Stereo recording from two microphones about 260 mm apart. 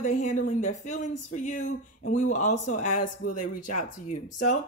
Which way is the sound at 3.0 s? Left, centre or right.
Left.